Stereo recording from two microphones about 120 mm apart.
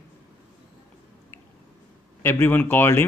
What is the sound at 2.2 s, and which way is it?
Speech, 15° left (ahead or behind).